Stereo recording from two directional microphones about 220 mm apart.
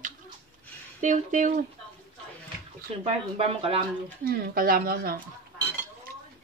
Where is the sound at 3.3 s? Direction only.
25° right (ahead or behind).